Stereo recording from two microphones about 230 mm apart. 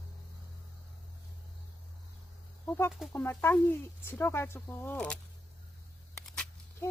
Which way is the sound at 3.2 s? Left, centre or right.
Centre.